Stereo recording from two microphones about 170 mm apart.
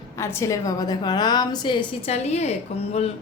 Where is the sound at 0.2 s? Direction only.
15° left (ahead or behind).